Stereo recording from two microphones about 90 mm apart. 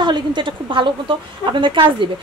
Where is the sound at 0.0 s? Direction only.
60° right (ahead or behind).